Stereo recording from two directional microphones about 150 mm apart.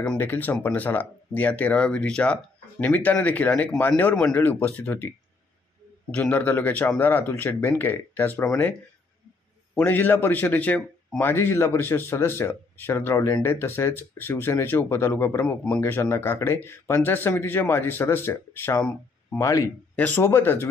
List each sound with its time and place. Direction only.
0.0 s a man's voice: 10° left (ahead or behind)
6.1 s a man's voice: 10° left (ahead or behind)
9.8 s a man's voice: 10° left (ahead or behind)